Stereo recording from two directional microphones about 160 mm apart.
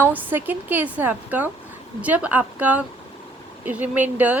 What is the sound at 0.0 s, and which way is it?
A woman's voice, 10° right (ahead or behind).